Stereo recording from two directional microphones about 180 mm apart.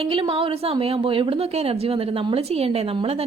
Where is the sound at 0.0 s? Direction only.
30° right (ahead or behind).